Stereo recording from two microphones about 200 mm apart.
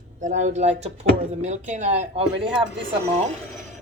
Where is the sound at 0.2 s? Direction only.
35° right (ahead or behind).